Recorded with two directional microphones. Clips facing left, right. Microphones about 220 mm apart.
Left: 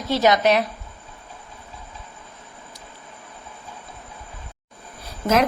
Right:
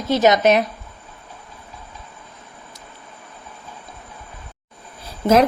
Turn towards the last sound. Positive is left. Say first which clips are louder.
# right 5 dB
turn(degrees=-35)  # may be behind; listen again after turning